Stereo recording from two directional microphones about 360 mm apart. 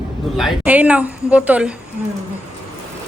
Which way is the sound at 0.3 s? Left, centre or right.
Centre.